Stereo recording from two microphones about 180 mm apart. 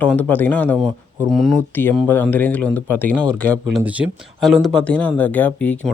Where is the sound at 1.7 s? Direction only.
10° left (ahead or behind).